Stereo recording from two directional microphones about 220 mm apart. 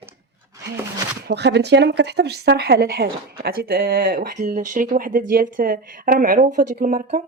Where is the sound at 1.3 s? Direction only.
50° right (ahead or behind).